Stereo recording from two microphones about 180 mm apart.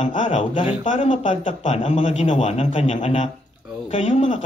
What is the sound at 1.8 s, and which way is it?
A man's voice, 40° left (ahead or behind).